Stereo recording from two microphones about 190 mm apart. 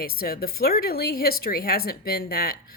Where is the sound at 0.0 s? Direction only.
50° left (ahead or behind).